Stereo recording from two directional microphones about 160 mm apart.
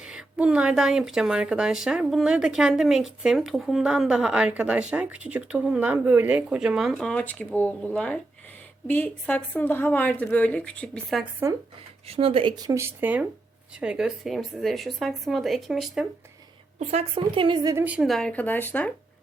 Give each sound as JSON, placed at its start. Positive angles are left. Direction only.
{"t": 0.0, "sound": "a woman's voice", "side_deg": -5}
{"t": 12.0, "sound": "a woman's voice", "side_deg": -35}
{"t": 16.8, "sound": "a woman's voice", "side_deg": -40}
{"t": 17.8, "sound": "a woman's voice", "side_deg": -5}